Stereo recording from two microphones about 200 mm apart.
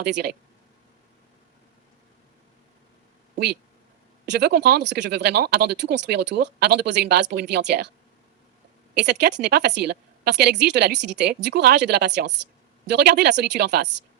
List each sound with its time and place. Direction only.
0.0 s speech: 55° right (ahead or behind)
3.3 s speech: 55° right (ahead or behind)
9.0 s speech: 55° right (ahead or behind)